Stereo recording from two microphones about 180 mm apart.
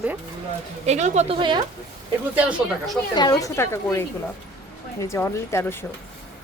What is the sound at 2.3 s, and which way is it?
Speech, 5° right (ahead or behind).